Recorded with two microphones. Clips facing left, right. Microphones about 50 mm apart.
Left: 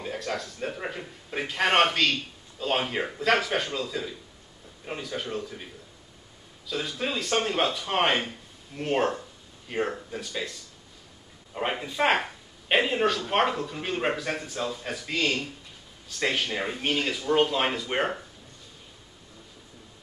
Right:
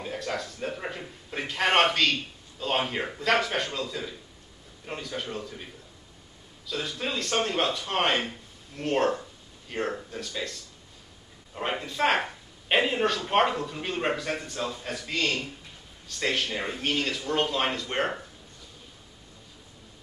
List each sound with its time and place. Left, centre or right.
0.0 s a man's voice: centre
6.7 s a man's voice: centre
11.8 s a man's voice: centre